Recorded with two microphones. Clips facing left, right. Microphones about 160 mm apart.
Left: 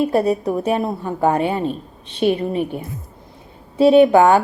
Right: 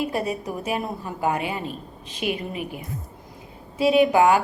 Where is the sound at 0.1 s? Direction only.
35° left (ahead or behind).